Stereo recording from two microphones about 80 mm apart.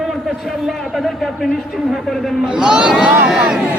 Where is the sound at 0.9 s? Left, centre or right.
Centre.